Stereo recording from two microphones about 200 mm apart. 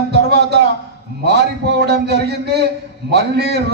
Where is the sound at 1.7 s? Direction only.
55° right (ahead or behind).